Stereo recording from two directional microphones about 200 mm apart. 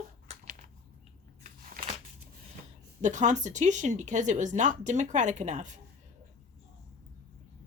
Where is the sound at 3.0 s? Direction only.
35° right (ahead or behind).